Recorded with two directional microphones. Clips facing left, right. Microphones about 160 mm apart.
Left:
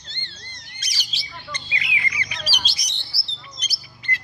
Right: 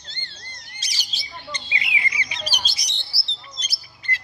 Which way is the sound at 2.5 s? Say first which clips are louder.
Even; 40° right (ahead or behind).